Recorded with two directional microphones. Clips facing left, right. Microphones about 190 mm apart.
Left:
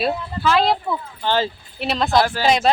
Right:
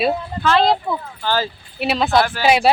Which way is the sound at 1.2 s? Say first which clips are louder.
Left 1 dB; 25° left (ahead or behind).